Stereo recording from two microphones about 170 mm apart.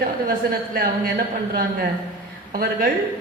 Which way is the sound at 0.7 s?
60° right (ahead or behind).